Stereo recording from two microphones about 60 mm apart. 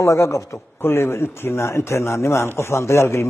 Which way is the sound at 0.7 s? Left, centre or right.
Left.